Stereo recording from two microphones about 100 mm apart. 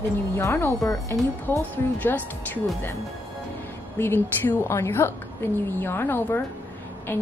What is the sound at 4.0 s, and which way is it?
A woman's voice, 20° left (ahead or behind).